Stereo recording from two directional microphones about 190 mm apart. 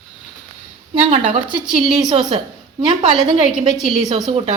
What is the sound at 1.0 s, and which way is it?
Speech, 30° right (ahead or behind).